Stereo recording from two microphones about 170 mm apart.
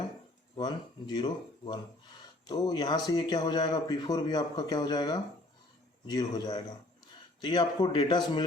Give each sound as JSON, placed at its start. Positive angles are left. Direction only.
{"t": 0.5, "sound": "speech", "side_deg": 25}